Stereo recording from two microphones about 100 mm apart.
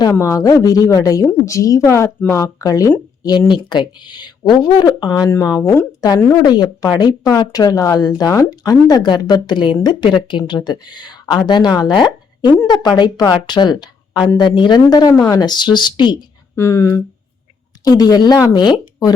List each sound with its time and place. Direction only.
0.2 s a woman's voice: 35° left (ahead or behind)
3.2 s a woman's voice: 50° left (ahead or behind)
16.6 s speech: 30° left (ahead or behind)
17.8 s a woman's voice: 40° left (ahead or behind)